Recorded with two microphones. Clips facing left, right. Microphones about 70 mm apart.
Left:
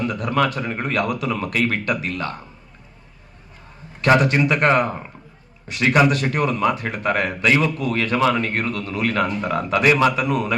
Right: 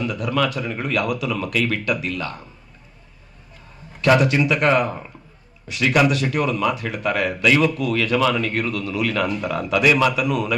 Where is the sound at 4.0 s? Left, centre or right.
Left.